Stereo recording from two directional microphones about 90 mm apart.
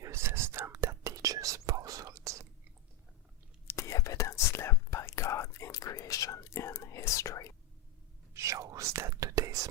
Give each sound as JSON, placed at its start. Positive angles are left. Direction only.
{"t": 0.0, "sound": "whispering", "side_deg": -30}
{"t": 3.7, "sound": "whispering", "side_deg": 35}
{"t": 8.3, "sound": "whispering", "side_deg": -35}